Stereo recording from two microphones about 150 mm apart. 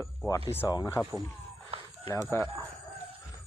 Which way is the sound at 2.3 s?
15° left (ahead or behind).